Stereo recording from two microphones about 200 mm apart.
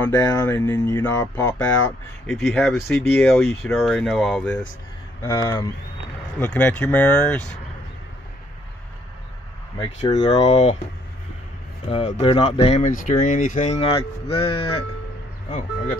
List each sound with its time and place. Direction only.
0.1 s speech: 15° left (ahead or behind)
2.2 s speech: centre (ahead or behind)
5.2 s speech: 20° left (ahead or behind)
6.4 s speech: 5° left (ahead or behind)
10.1 s speech: 30° left (ahead or behind)
11.9 s speech: 30° left (ahead or behind)